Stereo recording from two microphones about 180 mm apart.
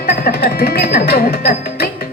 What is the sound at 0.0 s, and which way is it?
Music, 55° left (ahead or behind).